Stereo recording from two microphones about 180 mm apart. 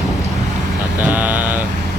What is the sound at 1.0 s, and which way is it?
Vehicle, 10° right (ahead or behind).